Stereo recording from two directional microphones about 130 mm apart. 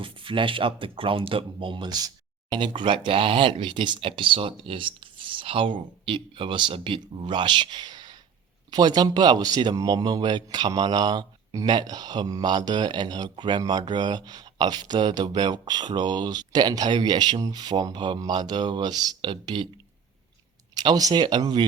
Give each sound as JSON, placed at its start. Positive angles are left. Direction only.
{"t": 0.0, "sound": "speech", "side_deg": -40}
{"t": 20.7, "sound": "speech", "side_deg": -30}